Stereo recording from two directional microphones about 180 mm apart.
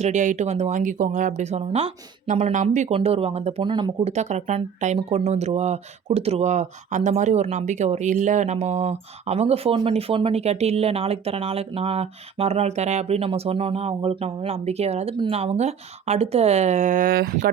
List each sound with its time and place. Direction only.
0.0 s speech: 40° right (ahead or behind); by 4.1 s 25° right (ahead or behind)
4.1 s speech: 40° right (ahead or behind); by 17.3 s 55° right (ahead or behind)